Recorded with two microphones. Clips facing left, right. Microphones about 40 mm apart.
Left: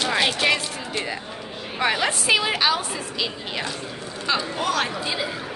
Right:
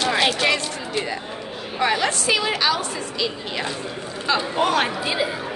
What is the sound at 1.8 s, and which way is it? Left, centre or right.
A woman's voice, centre.